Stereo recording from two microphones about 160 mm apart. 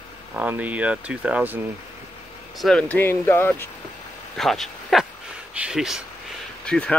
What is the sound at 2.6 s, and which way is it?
Speech, 5° left (ahead or behind).